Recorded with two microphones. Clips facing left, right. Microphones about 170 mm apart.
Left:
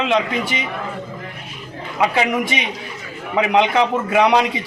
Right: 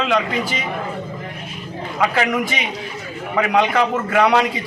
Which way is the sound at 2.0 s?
10° left (ahead or behind).